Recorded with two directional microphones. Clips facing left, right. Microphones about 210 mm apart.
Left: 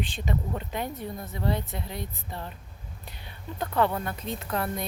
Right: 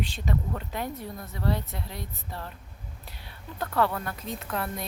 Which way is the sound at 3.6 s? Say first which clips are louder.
Left 1 dB; 20° left (ahead or behind).